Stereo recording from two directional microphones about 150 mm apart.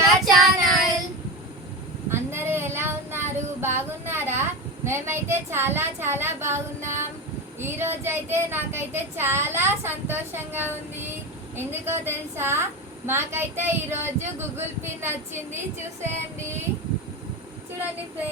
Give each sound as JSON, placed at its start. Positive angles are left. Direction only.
{"t": 0.0, "sound": "child singing", "side_deg": 0}
{"t": 2.0, "sound": "child singing", "side_deg": -15}
{"t": 5.3, "sound": "a woman's voice", "side_deg": -15}